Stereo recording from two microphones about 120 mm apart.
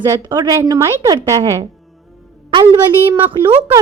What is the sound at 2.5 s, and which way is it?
A woman's voice, 40° right (ahead or behind).